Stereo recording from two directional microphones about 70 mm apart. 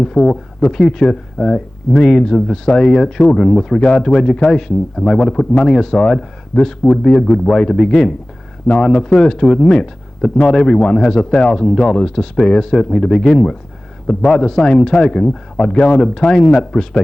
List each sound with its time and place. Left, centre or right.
0.0 s speech: centre